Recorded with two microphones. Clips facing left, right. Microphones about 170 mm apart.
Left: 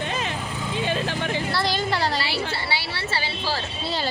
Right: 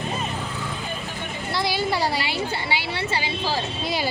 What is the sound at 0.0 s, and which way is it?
Vehicle, 90° left.